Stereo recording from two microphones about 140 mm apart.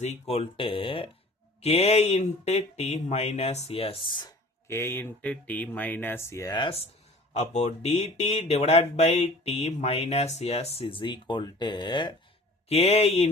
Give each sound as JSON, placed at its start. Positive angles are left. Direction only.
{"t": 0.0, "sound": "speech", "side_deg": 50}
{"t": 4.7, "sound": "speech", "side_deg": 15}
{"t": 6.5, "sound": "speech", "side_deg": 40}
{"t": 7.3, "sound": "speech", "side_deg": 55}
{"t": 12.6, "sound": "speech", "side_deg": 45}